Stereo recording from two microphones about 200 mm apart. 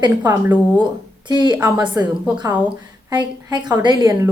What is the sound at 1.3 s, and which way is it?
A woman's voice, 20° right (ahead or behind).